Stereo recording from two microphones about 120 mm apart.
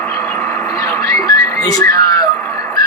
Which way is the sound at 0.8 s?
20° left (ahead or behind).